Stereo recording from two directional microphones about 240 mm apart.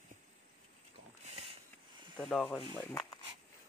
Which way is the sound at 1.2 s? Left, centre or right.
Right.